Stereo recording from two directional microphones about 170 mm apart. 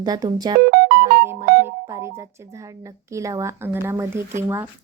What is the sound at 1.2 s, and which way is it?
Music, 15° right (ahead or behind).